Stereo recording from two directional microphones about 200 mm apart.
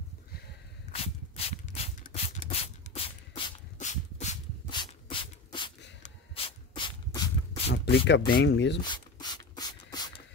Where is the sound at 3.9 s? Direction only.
35° left (ahead or behind).